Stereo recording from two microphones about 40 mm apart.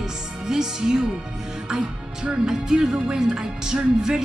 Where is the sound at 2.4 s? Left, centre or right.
Centre.